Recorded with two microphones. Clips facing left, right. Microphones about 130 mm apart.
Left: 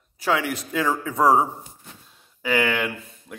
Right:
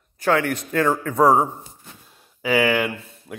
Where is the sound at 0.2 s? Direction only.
5° left (ahead or behind).